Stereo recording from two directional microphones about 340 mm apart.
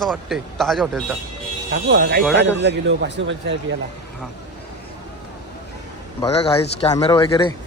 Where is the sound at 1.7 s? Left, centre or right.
Right.